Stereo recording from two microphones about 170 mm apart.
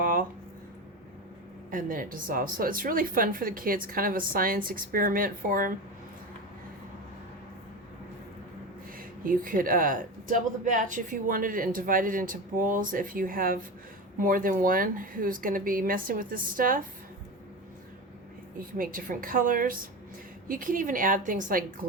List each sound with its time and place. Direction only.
0.0 s a sound: 55° right (ahead or behind)
1.7 s a woman's voice: 50° right (ahead or behind)
9.0 s a woman's voice: 55° right (ahead or behind)
18.6 s a woman's voice: 55° right (ahead or behind)